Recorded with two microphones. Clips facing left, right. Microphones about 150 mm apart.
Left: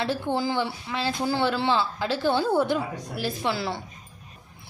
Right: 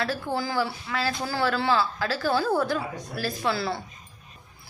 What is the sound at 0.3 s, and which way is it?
Speech, 20° left (ahead or behind).